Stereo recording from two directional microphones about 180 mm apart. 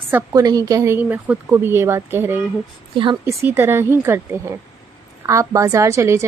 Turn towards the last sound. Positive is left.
turn(degrees=-15)  # may be behind; listen again after turning